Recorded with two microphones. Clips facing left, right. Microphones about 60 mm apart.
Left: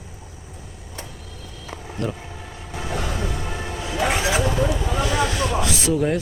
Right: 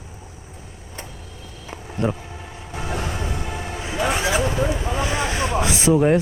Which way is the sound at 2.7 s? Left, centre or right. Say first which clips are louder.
Even; right.